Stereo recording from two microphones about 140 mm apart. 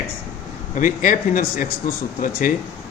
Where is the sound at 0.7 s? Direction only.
65° left (ahead or behind).